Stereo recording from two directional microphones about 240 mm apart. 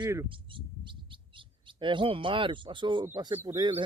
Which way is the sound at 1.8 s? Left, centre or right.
Right.